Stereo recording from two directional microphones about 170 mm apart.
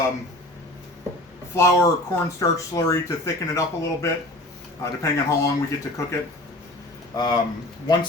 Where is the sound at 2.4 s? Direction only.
20° left (ahead or behind).